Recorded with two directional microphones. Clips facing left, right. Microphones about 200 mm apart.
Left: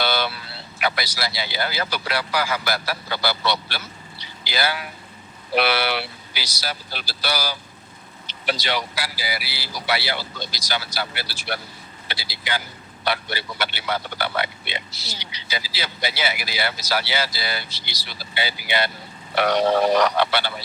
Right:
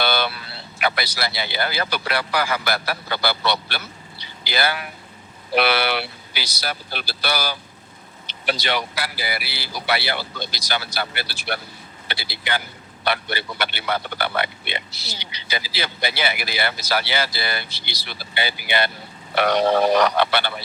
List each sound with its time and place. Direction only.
0.0 s a sound: 60° right (ahead or behind)
0.8 s a man's voice: 55° right (ahead or behind)
20.1 s a man's voice: 55° right (ahead or behind)